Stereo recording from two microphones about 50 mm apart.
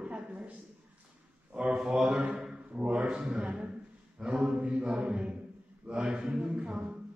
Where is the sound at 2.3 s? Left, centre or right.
Centre.